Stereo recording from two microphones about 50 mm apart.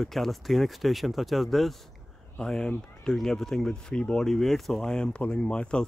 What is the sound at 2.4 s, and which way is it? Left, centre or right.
Speech, centre.